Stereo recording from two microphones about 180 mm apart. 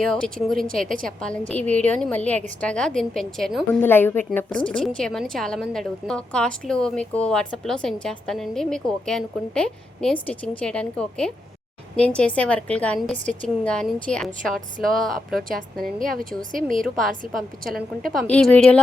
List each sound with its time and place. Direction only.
0.0 s a woman's voice: 5° left (ahead or behind)
16.5 s a woman's voice: 50° right (ahead or behind)
16.7 s a woman's voice: centre (ahead or behind)
18.1 s a woman's voice: 5° left (ahead or behind)